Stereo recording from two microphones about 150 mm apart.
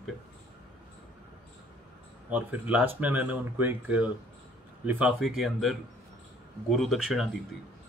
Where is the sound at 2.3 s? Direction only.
10° right (ahead or behind).